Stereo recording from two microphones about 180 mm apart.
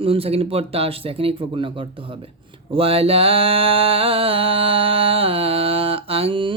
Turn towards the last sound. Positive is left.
turn(degrees=-30)  # may be behind; listen again after turning